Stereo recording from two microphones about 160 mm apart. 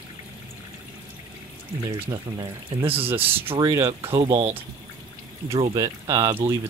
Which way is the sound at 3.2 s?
35° right (ahead or behind).